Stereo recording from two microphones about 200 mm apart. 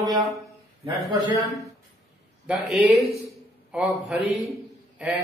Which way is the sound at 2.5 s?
Centre (ahead or behind).